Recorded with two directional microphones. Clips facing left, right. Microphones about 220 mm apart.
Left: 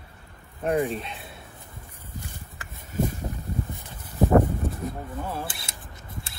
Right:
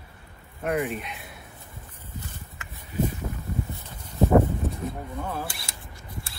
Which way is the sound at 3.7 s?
15° left (ahead or behind).